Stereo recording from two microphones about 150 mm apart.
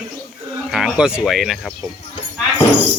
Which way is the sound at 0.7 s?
5° right (ahead or behind).